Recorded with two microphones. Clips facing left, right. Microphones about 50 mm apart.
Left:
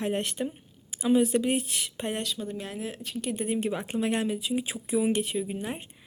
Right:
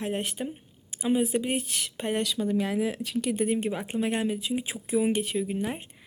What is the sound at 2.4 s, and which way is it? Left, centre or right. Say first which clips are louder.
Speech: right 8 dB; right.